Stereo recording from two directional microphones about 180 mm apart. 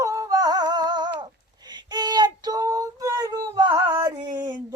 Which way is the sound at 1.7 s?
25° right (ahead or behind).